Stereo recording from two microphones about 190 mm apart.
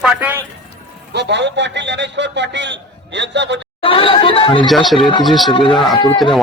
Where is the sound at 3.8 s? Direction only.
30° left (ahead or behind).